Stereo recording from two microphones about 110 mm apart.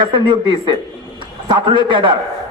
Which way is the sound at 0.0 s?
45° right (ahead or behind).